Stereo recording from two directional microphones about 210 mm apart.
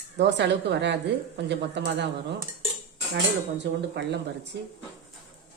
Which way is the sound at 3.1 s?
55° right (ahead or behind).